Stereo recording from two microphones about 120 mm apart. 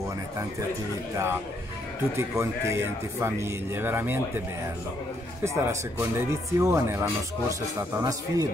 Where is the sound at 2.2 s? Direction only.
25° right (ahead or behind).